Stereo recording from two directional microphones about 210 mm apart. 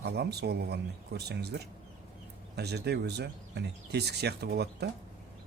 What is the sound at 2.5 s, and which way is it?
Speech, 50° right (ahead or behind).